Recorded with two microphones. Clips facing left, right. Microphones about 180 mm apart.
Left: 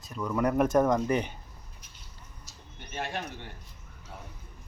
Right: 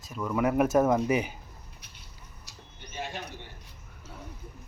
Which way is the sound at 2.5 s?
65° right (ahead or behind).